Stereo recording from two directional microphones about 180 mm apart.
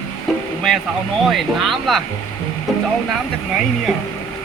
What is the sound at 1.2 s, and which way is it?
Speech, centre (ahead or behind).